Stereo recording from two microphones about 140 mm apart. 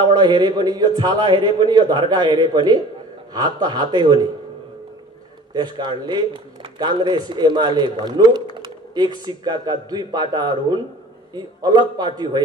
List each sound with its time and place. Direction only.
0.0 s a man's voice: 30° right (ahead or behind)
5.5 s a man's voice: 30° right (ahead or behind)